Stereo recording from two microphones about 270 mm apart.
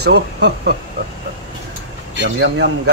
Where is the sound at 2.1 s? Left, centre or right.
Right.